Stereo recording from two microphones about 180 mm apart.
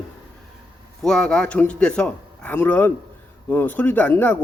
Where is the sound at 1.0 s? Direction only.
5° left (ahead or behind).